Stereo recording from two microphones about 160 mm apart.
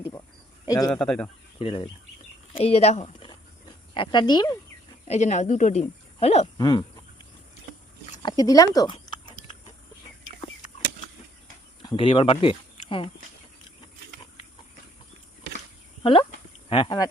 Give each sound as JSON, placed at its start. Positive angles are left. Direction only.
{"t": 0.6, "sound": "cricket", "side_deg": 25}
{"t": 0.9, "sound": "speech", "side_deg": 5}
{"t": 1.5, "sound": "speech", "side_deg": 35}
{"t": 3.9, "sound": "speech", "side_deg": 30}
{"t": 5.0, "sound": "speech", "side_deg": 45}
{"t": 6.6, "sound": "a sound", "side_deg": 25}
{"t": 8.2, "sound": "chewing", "side_deg": 25}
{"t": 11.8, "sound": "speech", "side_deg": 30}
{"t": 16.6, "sound": "speech", "side_deg": 30}